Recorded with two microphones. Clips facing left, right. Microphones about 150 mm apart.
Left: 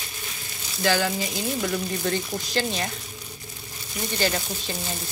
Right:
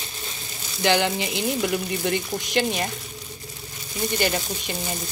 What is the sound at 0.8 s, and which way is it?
Speech, 20° right (ahead or behind).